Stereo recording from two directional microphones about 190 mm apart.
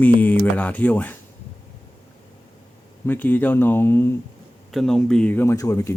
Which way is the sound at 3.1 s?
10° left (ahead or behind).